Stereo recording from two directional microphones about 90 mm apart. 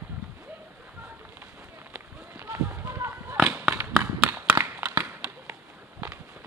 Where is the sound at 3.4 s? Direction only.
10° right (ahead or behind).